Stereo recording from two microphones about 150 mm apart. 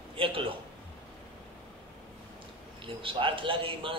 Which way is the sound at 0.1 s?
35° right (ahead or behind).